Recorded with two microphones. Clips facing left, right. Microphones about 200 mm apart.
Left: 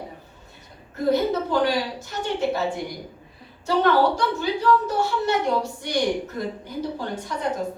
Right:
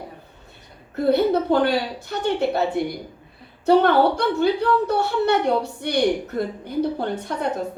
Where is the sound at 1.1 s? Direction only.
60° right (ahead or behind).